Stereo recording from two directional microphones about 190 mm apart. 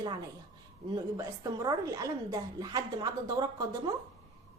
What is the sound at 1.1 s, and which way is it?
A woman's voice, 15° right (ahead or behind).